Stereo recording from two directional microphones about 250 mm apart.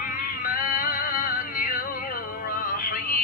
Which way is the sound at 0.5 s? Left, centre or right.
Left.